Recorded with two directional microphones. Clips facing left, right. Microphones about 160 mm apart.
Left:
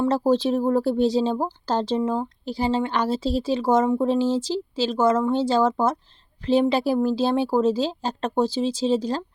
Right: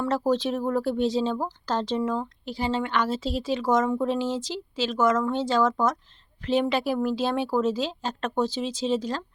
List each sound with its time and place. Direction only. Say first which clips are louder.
0.0 s speech: left 4 dB; 30° left (ahead or behind)